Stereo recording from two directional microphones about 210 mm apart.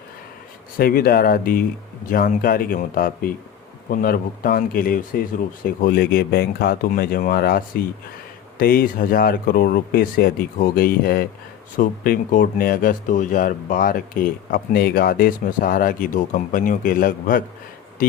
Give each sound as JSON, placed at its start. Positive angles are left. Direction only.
{"t": 0.8, "sound": "speech", "side_deg": 45}